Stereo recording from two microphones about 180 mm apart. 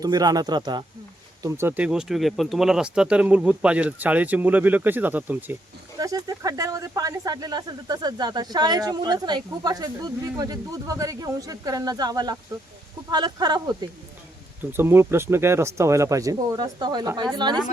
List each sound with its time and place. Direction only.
0.0 s speech: 20° right (ahead or behind)
14.6 s speech: 10° right (ahead or behind)